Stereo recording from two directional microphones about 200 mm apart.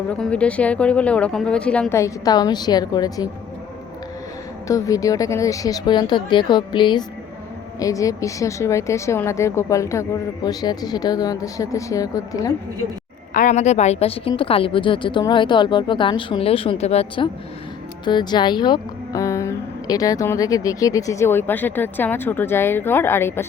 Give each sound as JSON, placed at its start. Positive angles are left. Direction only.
{"t": 0.1, "sound": "a woman's voice", "side_deg": 5}
{"t": 4.7, "sound": "a woman's voice", "side_deg": 15}
{"t": 13.3, "sound": "a woman's voice", "side_deg": 40}